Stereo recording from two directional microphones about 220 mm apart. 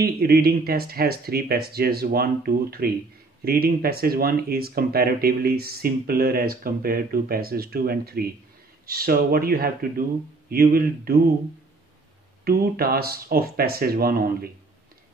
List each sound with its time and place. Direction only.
0.0 s speech: 45° right (ahead or behind)
12.4 s speech: 45° right (ahead or behind)